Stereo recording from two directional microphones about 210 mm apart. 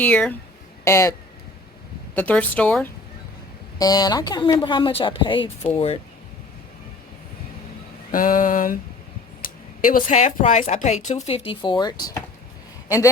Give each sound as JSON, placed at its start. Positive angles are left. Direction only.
{"t": 0.0, "sound": "speech", "side_deg": 5}
{"t": 2.1, "sound": "speech", "side_deg": 5}
{"t": 3.8, "sound": "a woman's voice", "side_deg": 20}
{"t": 8.1, "sound": "speech", "side_deg": 40}